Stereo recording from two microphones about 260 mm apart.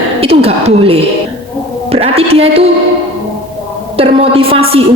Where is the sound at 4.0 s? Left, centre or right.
Right.